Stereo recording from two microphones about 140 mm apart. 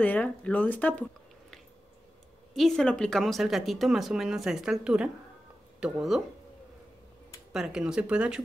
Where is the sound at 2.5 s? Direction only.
5° left (ahead or behind).